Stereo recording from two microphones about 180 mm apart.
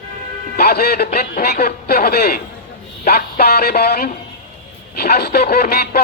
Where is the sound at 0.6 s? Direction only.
60° left (ahead or behind).